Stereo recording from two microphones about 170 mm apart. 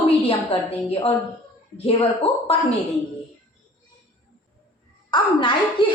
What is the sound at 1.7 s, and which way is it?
Speech, 35° left (ahead or behind).